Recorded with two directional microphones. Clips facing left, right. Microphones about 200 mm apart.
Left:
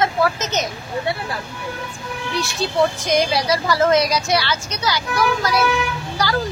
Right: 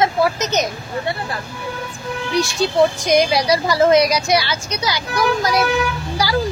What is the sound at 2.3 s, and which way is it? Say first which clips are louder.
A woman's voice: right 4 dB; 15° right (ahead or behind).